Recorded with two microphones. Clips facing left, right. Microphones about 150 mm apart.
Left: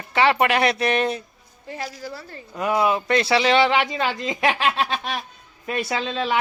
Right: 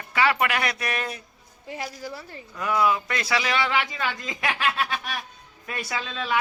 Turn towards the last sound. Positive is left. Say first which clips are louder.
# left 4 dB
turn(degrees=25)  # may be behind; listen again after turning